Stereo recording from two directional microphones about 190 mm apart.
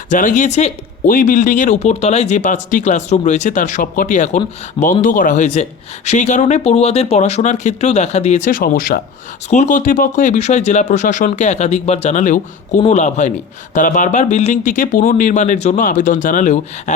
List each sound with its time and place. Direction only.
0.1 s speech: 45° left (ahead or behind)
9.5 s speech: 40° left (ahead or behind)